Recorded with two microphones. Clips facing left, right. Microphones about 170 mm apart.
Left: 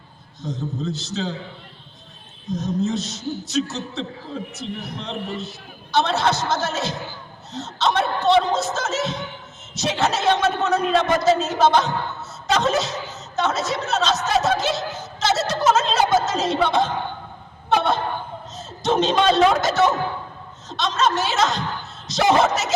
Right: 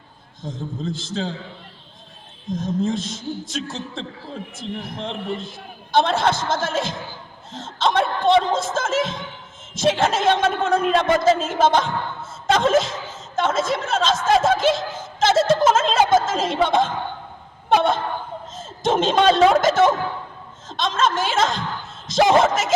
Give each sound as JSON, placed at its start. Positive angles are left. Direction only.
{"t": 0.4, "sound": "a man's voice", "side_deg": -50}
{"t": 2.6, "sound": "a man's voice", "side_deg": -50}
{"t": 15.2, "sound": "a sound", "side_deg": -50}
{"t": 17.7, "sound": "a man's voice", "side_deg": -50}